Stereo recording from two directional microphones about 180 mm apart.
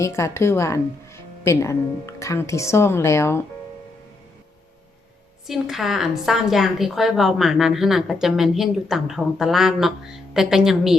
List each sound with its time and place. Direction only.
0.0 s a woman's voice: 15° left (ahead or behind)
5.5 s a woman's voice: centre (ahead or behind)